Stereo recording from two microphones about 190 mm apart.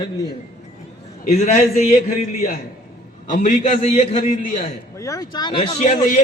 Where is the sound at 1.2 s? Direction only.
40° left (ahead or behind).